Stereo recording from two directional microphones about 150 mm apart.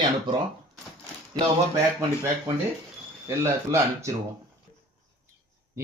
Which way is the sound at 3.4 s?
20° right (ahead or behind).